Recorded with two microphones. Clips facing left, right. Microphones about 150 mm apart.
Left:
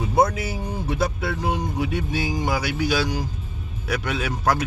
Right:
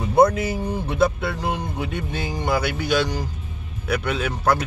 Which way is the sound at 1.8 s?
5° left (ahead or behind).